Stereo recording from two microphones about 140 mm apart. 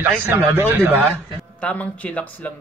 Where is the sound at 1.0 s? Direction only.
5° left (ahead or behind).